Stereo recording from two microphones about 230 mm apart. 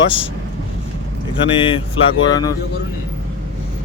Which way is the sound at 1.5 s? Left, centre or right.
Left.